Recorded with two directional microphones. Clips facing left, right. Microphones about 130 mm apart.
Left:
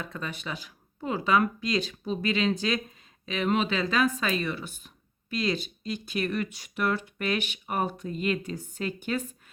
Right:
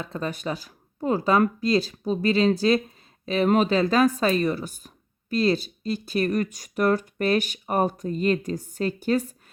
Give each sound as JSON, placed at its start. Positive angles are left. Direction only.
{"t": 0.0, "sound": "speech", "side_deg": -35}